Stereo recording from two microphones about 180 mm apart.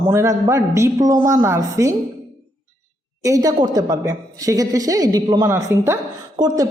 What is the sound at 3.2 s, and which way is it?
A woman's voice, 20° right (ahead or behind).